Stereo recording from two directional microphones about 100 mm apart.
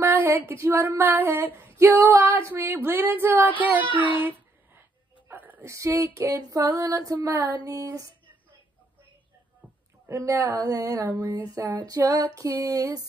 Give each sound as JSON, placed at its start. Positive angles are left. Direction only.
{"t": 0.0, "sound": "a sound", "side_deg": -25}
{"t": 5.7, "sound": "female singing", "side_deg": -30}
{"t": 10.0, "sound": "female singing", "side_deg": -30}